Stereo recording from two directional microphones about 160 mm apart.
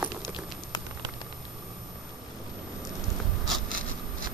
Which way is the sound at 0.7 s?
25° left (ahead or behind).